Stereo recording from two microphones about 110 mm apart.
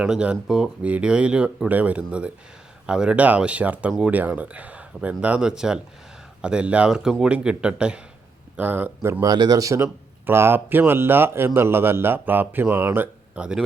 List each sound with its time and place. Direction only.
0.0 s speech: 10° right (ahead or behind)
9.2 s speech: 40° right (ahead or behind); by 13.4 s 20° right (ahead or behind)